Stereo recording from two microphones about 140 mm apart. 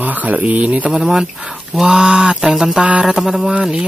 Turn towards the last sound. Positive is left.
turn(degrees=-5)  # may be behind; listen again after turning